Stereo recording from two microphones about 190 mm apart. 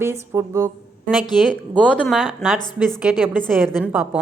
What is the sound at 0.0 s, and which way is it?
Speech, 15° right (ahead or behind).